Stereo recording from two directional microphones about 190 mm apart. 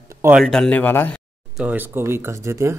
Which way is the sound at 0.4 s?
5° left (ahead or behind).